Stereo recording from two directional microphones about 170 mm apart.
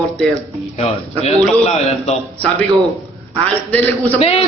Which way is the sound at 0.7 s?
40° left (ahead or behind).